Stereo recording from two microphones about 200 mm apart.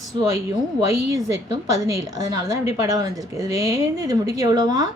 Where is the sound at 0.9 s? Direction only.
15° right (ahead or behind).